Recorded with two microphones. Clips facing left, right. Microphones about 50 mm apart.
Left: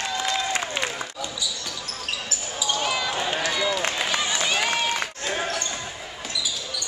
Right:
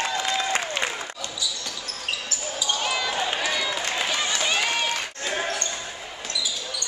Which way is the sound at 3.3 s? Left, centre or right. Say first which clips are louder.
Left 2 dB; centre.